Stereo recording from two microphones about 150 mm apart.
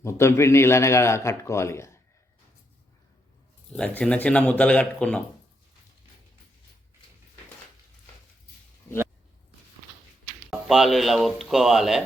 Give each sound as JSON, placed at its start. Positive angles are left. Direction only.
{"t": 0.0, "sound": "a man's voice", "side_deg": 15}
{"t": 3.7, "sound": "a man's voice", "side_deg": 10}
{"t": 10.7, "sound": "speech", "side_deg": 0}